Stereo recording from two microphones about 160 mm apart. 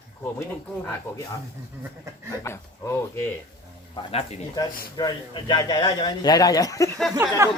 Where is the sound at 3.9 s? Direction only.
40° left (ahead or behind).